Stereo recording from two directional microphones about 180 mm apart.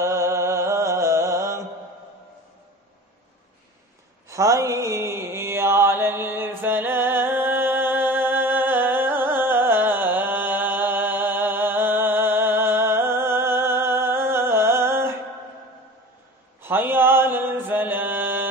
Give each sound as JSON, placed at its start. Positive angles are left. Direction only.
{"t": 0.0, "sound": "music", "side_deg": -15}
{"t": 4.3, "sound": "mantra", "side_deg": -15}
{"t": 16.6, "sound": "mantra", "side_deg": -10}